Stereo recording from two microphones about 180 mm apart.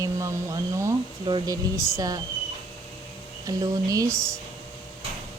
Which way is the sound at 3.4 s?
20° right (ahead or behind).